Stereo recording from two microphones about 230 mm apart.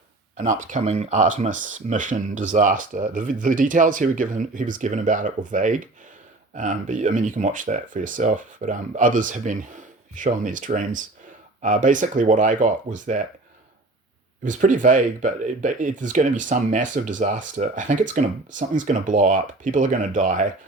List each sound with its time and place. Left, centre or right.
0.3 s speech: right
14.4 s speech: right